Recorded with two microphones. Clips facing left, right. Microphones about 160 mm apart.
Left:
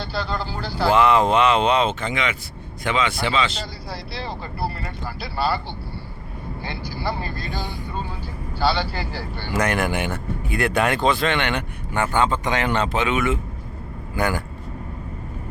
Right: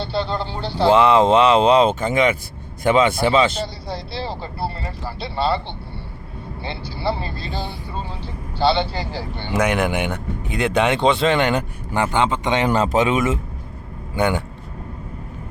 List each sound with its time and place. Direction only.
0.0 s speech: 25° right (ahead or behind); by 3.6 s 50° right (ahead or behind)
3.9 s speech: 30° right (ahead or behind)
7.0 s speech: 25° right (ahead or behind)
11.9 s speech: 20° right (ahead or behind)
12.6 s speech: 35° right (ahead or behind)
14.2 s speech: 20° right (ahead or behind)